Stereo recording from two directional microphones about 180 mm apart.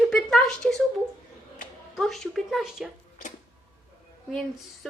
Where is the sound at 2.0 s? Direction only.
Centre (ahead or behind).